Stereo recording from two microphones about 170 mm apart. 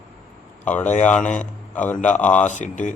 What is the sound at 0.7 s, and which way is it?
Mantra, 10° left (ahead or behind).